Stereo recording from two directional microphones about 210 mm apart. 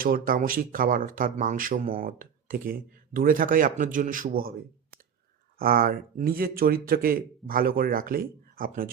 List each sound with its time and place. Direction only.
0.0 s speech: 45° right (ahead or behind)
5.5 s speech: 45° right (ahead or behind)